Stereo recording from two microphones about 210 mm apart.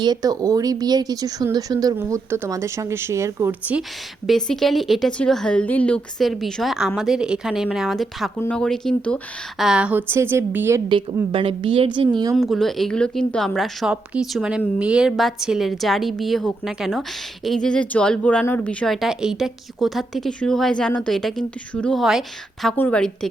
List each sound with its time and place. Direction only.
0.0 s speech: 20° right (ahead or behind)
4.3 s a woman's voice: centre (ahead or behind); by 12.4 s 20° right (ahead or behind)
12.4 s speech: centre (ahead or behind)